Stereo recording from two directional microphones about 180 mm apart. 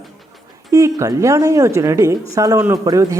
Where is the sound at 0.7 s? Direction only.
20° right (ahead or behind).